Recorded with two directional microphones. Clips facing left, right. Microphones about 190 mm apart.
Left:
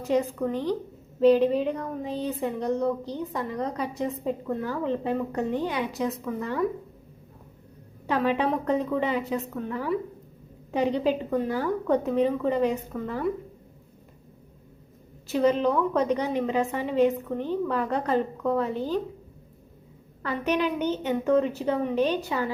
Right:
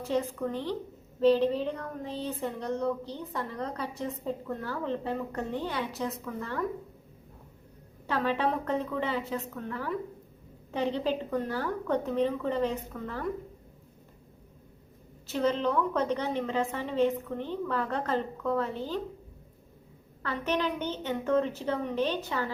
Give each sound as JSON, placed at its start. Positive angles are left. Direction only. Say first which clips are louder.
{"t": 0.0, "sound": "speech", "louder": "left 5 dB", "side_deg": 15}
{"t": 8.0, "sound": "speech", "louder": "left 4 dB", "side_deg": 15}
{"t": 15.3, "sound": "speech", "louder": "left 5 dB", "side_deg": 15}
{"t": 20.2, "sound": "speech", "louder": "left 4 dB", "side_deg": 15}